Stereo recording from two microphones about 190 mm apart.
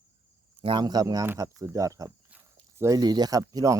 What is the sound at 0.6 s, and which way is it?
Speech, 25° right (ahead or behind).